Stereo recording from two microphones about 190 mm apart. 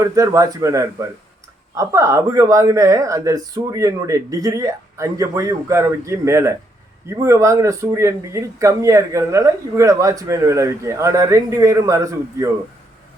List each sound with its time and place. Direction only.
0.0 s speech: 15° right (ahead or behind)